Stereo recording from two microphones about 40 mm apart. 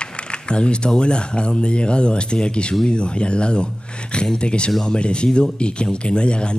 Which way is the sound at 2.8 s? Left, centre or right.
Left.